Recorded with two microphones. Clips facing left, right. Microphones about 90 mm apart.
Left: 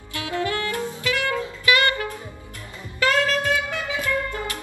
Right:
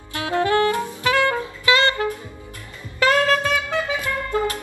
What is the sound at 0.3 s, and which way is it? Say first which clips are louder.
Saxophone: right 6 dB; 30° right (ahead or behind).